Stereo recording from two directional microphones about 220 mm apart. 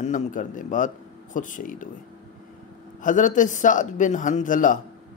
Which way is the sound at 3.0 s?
35° left (ahead or behind).